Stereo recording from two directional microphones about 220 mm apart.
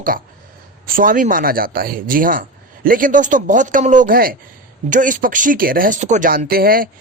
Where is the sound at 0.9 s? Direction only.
40° right (ahead or behind).